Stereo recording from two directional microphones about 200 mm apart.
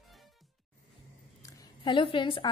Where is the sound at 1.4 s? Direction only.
20° left (ahead or behind).